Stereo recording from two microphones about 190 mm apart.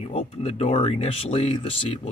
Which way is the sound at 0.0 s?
30° left (ahead or behind).